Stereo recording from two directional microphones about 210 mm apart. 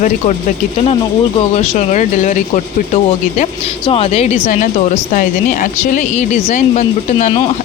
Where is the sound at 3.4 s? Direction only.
25° left (ahead or behind).